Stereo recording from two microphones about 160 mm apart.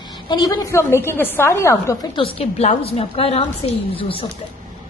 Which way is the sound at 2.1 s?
35° left (ahead or behind).